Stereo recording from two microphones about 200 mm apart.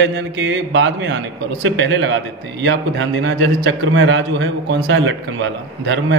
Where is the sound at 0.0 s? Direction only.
65° right (ahead or behind).